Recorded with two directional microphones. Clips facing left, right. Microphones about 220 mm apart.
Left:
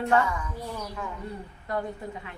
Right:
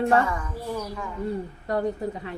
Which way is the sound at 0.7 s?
Centre (ahead or behind).